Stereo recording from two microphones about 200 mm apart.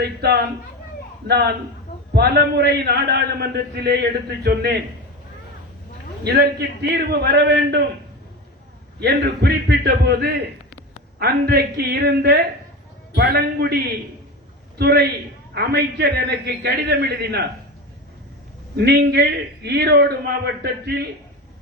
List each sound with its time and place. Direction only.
0.0 s a man's voice: 55° right (ahead or behind)
6.2 s a man's voice: 55° right (ahead or behind)
9.0 s a man's voice: 55° right (ahead or behind)
18.8 s a man's voice: 55° right (ahead or behind)